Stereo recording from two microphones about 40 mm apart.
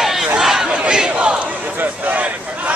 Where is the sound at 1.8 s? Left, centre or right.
Right.